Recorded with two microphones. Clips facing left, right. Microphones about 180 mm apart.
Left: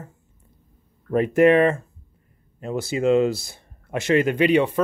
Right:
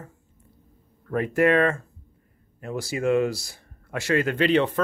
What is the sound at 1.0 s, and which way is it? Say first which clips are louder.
Speech: left 5 dB; 20° left (ahead or behind).